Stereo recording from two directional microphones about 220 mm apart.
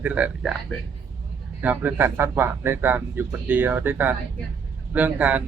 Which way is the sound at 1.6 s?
10° right (ahead or behind).